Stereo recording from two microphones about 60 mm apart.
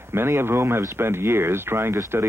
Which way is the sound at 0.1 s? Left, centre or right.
Right.